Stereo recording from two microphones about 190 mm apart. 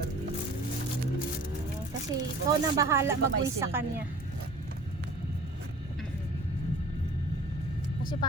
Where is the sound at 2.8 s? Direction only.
15° right (ahead or behind).